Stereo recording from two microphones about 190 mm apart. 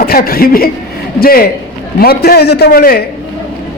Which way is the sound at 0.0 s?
50° left (ahead or behind).